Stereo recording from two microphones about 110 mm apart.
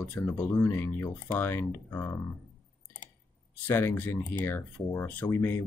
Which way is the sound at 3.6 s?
20° left (ahead or behind).